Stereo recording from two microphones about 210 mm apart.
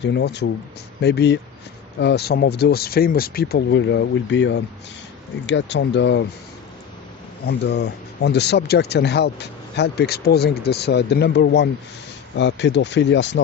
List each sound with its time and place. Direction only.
0.0 s speech: 55° left (ahead or behind)
7.4 s speech: 55° left (ahead or behind)